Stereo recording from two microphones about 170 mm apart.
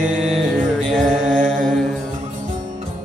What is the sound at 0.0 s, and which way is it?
Mantra, centre (ahead or behind).